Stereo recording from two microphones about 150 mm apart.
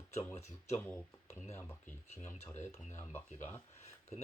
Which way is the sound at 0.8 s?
15° left (ahead or behind).